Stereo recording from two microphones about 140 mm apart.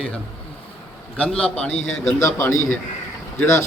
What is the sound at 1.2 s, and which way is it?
Speech, 5° left (ahead or behind).